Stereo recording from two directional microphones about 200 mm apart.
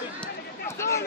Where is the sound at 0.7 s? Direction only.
15° left (ahead or behind).